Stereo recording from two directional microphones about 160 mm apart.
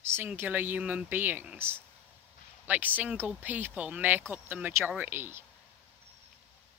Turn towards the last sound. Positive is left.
turn(degrees=-15)  # may be behind; listen again after turning